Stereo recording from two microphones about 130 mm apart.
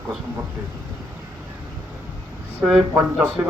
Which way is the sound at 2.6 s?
10° right (ahead or behind).